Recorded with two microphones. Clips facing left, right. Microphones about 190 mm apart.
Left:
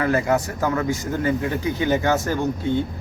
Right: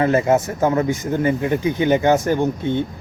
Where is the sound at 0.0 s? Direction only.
25° right (ahead or behind).